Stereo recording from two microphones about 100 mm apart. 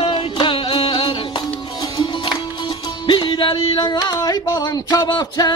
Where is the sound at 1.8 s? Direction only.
50° left (ahead or behind).